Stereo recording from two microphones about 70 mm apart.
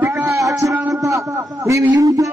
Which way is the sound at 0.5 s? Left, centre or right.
Right.